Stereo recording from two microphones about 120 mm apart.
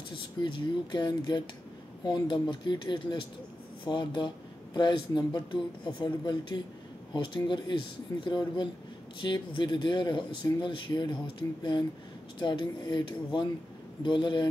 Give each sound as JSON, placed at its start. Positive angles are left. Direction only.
{"t": 0.1, "sound": "speech", "side_deg": 45}
{"t": 12.4, "sound": "speech", "side_deg": 40}